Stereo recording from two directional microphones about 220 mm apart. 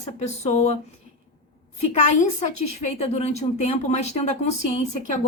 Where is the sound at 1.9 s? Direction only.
35° left (ahead or behind).